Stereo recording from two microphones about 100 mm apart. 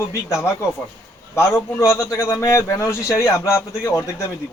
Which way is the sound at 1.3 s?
25° left (ahead or behind).